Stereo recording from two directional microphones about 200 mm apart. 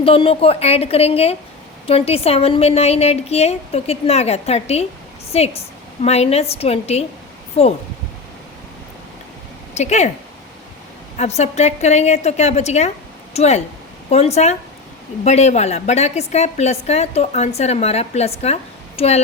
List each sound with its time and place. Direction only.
0.0 s a woman's voice: 30° left (ahead or behind)
9.7 s a woman's voice: 35° left (ahead or behind)
11.2 s a woman's voice: 35° left (ahead or behind)